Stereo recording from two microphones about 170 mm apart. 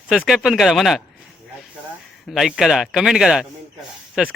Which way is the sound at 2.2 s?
Centre (ahead or behind).